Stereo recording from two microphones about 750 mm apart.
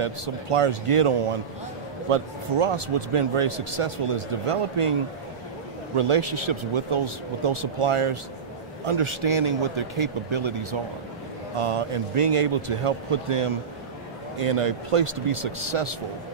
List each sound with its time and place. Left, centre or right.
0.0 s a man's voice: right
5.9 s a man's voice: right